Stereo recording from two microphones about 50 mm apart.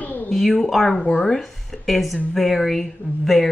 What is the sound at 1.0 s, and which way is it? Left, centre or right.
Speech, centre.